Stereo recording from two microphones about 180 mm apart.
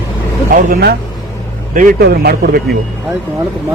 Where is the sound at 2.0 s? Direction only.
60° right (ahead or behind).